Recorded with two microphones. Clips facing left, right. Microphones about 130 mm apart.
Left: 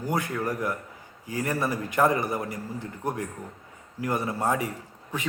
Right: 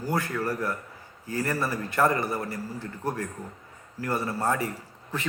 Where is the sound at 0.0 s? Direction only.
20° left (ahead or behind).